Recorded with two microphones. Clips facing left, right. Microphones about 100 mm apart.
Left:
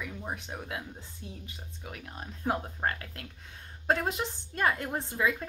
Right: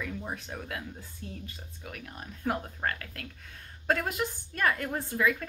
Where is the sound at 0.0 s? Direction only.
15° left (ahead or behind).